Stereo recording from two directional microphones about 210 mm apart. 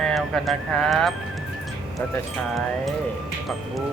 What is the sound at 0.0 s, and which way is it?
Speech, centre (ahead or behind).